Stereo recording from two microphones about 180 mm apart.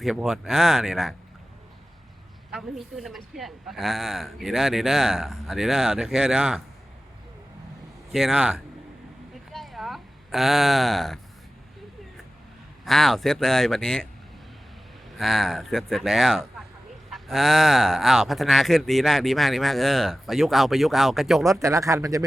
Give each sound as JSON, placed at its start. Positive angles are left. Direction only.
{"t": 0.0, "sound": "speech", "side_deg": 0}
{"t": 2.5, "sound": "speech", "side_deg": 0}
{"t": 8.1, "sound": "speech", "side_deg": -5}
{"t": 9.5, "sound": "a sound", "side_deg": 0}
{"t": 12.8, "sound": "speech", "side_deg": 0}
{"t": 15.2, "sound": "speech", "side_deg": 0}
{"t": 21.6, "sound": "speech", "side_deg": -15}